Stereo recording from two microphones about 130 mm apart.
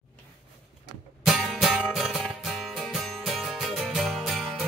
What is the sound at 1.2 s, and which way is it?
Music, centre (ahead or behind).